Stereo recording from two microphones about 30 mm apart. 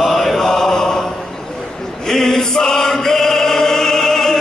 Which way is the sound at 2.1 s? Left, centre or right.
Centre.